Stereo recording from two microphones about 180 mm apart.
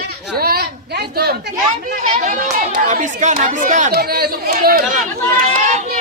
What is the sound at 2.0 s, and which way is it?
Speech, 45° right (ahead or behind).